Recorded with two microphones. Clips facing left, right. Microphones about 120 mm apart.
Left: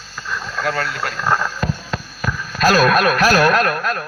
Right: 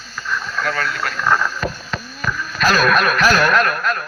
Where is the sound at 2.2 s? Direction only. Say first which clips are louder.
Left 2 dB; 40° left (ahead or behind).